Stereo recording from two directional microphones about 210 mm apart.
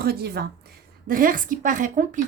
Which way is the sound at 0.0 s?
50° right (ahead or behind).